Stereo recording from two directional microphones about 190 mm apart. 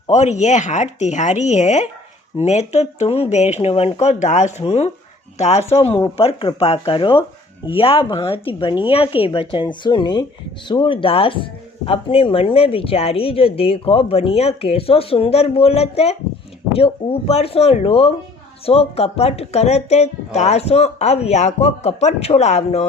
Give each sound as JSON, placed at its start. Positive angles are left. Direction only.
{"t": 0.1, "sound": "speech", "side_deg": 35}